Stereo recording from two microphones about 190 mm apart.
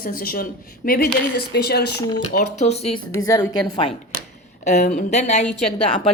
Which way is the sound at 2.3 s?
35° left (ahead or behind).